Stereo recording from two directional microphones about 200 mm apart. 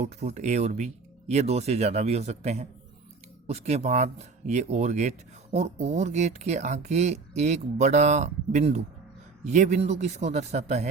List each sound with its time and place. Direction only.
0.0 s speech: 35° right (ahead or behind)